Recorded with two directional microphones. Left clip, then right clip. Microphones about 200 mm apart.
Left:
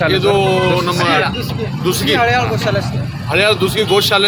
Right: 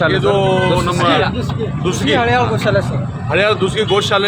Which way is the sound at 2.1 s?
55° right (ahead or behind).